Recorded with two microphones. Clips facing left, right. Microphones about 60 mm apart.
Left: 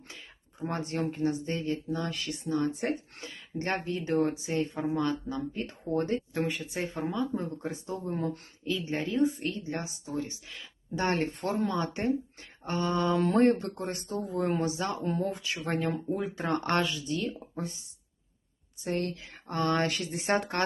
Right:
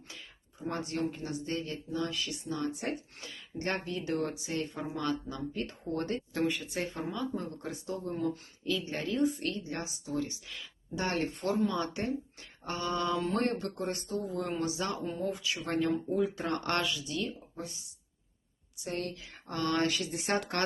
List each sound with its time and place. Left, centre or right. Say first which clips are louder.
0.7 s speech: left 1 dB; left
1.7 s speech: left 2 dB; left
11.7 s speech: left 4 dB; left
15.0 s speech: left 3 dB; left
18.9 s speech: left 5 dB; left